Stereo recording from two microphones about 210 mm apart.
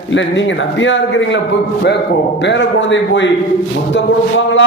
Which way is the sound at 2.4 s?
60° left (ahead or behind).